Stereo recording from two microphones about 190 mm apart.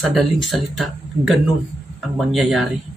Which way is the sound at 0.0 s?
Centre (ahead or behind).